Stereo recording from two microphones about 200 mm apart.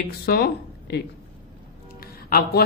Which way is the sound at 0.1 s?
50° left (ahead or behind).